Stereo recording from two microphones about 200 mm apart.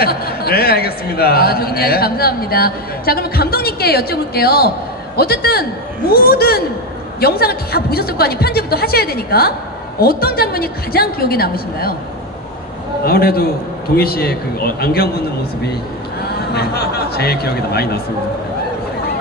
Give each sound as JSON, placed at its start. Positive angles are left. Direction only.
{"t": 0.0, "sound": "a man's voice", "side_deg": 50}
{"t": 13.0, "sound": "a man's voice", "side_deg": 50}
{"t": 16.5, "sound": "a man's voice", "side_deg": 50}